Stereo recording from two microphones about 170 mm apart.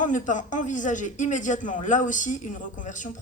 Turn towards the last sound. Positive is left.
turn(degrees=50)  # may be behind; listen again after turning